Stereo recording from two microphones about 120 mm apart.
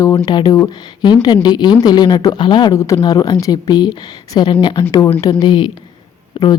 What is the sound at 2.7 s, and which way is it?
Speech, 25° left (ahead or behind).